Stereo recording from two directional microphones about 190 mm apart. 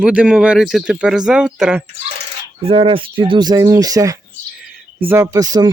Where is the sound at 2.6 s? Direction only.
30° right (ahead or behind).